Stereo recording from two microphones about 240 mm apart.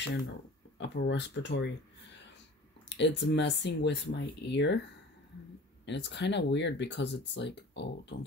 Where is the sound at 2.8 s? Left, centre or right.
Left.